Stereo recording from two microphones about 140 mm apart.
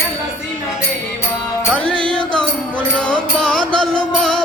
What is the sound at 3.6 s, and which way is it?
Music, 35° right (ahead or behind).